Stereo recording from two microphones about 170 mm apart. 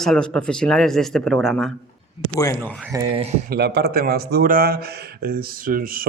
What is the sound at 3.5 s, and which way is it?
Speech, 75° right (ahead or behind).